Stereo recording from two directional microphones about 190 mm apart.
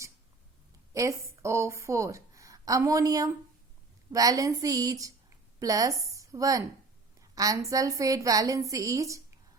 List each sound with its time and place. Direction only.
0.9 s a woman's voice: 15° right (ahead or behind)